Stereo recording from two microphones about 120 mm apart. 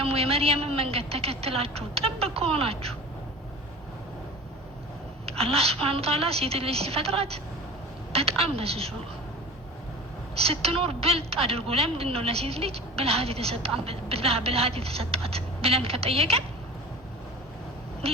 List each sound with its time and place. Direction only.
0.0 s a woman's voice: 55° right (ahead or behind)
5.2 s a woman's voice: 55° right (ahead or behind)
10.3 s a woman's voice: 55° right (ahead or behind)